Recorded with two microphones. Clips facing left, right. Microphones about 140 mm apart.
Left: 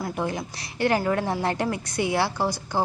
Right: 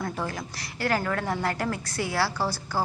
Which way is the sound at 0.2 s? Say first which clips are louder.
Left 4 dB; 20° left (ahead or behind).